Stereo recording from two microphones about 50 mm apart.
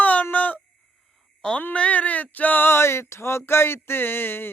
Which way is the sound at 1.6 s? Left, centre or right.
Left.